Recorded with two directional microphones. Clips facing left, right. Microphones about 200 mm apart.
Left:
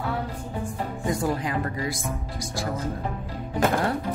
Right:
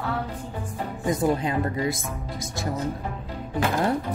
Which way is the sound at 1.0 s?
20° right (ahead or behind).